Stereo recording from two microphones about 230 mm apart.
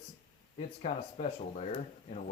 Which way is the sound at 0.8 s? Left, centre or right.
Left.